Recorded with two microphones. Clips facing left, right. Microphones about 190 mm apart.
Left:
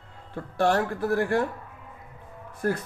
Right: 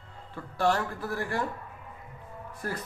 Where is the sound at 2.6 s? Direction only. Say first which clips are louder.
Left 9 dB; 55° left (ahead or behind).